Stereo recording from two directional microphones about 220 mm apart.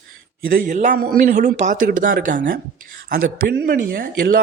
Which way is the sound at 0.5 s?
35° right (ahead or behind).